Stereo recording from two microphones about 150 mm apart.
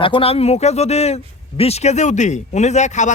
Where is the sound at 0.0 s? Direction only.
35° left (ahead or behind).